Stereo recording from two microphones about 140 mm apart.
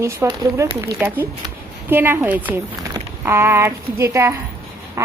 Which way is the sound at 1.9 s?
15° right (ahead or behind).